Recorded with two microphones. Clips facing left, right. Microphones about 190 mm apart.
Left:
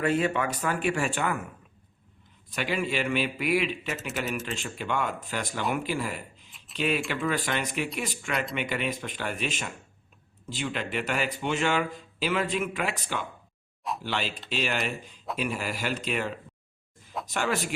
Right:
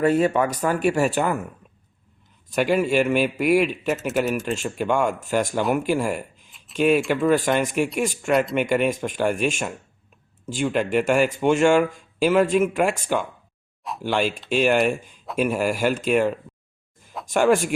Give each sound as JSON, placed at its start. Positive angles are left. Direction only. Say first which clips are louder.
{"t": 0.0, "sound": "speech", "louder": "right 7 dB", "side_deg": -40}
{"t": 2.6, "sound": "speech", "louder": "right 9 dB", "side_deg": -45}